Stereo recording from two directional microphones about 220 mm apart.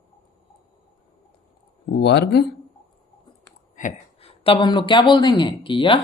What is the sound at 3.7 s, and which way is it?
Speech, 30° left (ahead or behind).